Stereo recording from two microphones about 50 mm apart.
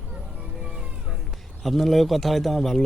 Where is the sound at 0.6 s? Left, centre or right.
Centre.